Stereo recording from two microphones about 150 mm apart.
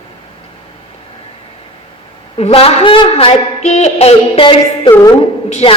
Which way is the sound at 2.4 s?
40° left (ahead or behind).